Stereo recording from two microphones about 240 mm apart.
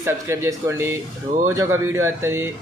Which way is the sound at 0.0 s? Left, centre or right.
Centre.